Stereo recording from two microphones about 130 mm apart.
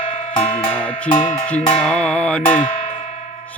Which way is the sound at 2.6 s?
55° left (ahead or behind).